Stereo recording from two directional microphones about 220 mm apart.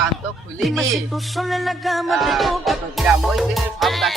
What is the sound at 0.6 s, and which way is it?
Music, centre (ahead or behind).